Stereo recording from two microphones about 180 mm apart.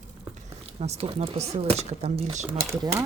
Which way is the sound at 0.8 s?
35° right (ahead or behind).